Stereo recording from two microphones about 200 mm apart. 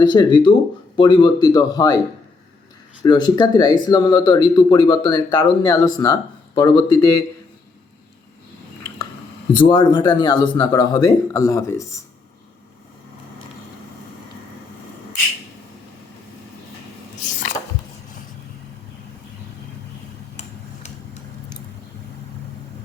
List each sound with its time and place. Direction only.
0.0 s speech: 20° left (ahead or behind)
3.0 s speech: 20° left (ahead or behind)
9.6 s speech: 20° left (ahead or behind)